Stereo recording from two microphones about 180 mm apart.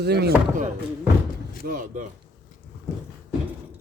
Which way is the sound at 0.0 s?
65° right (ahead or behind).